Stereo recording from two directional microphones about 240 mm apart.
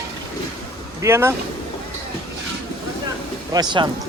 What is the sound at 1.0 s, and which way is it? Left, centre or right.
Speech, centre.